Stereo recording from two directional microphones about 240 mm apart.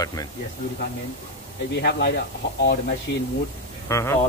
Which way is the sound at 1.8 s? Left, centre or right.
Left.